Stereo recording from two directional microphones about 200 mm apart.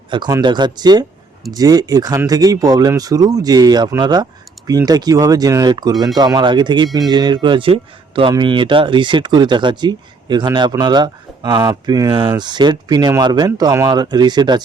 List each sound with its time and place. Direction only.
0.1 s speech: 20° right (ahead or behind)